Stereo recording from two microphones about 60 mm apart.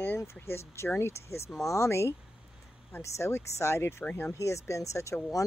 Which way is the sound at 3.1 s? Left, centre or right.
Left.